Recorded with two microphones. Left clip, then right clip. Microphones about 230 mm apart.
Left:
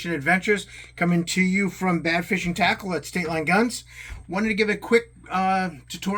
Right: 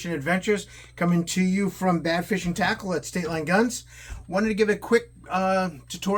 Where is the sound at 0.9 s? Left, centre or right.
Centre.